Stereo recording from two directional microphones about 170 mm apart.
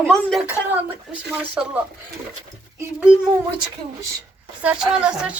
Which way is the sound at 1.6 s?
10° right (ahead or behind).